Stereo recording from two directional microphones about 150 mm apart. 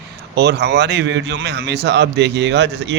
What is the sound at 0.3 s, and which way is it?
Speech, 90° right.